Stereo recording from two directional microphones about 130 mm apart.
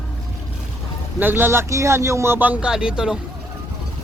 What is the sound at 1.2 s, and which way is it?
Speech, 15° right (ahead or behind).